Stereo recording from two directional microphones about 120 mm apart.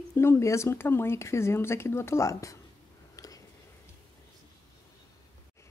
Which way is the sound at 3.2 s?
30° left (ahead or behind).